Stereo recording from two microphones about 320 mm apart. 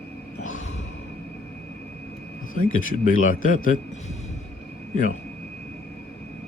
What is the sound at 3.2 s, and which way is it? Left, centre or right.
Speech, left.